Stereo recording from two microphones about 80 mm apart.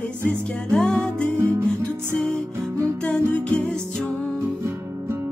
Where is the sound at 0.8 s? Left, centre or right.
Centre.